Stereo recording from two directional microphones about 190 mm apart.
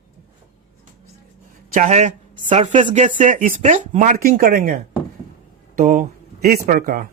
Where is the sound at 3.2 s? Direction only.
45° right (ahead or behind).